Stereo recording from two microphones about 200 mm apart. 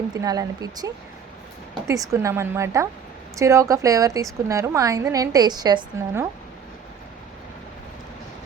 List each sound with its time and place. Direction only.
0.1 s speech: 20° right (ahead or behind)
1.9 s a woman's voice: 15° right (ahead or behind)